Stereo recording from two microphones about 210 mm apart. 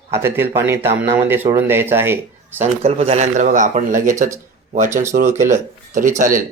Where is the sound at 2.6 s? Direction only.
30° right (ahead or behind).